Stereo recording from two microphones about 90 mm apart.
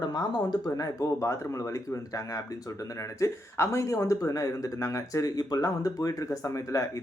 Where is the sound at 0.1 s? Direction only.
45° left (ahead or behind).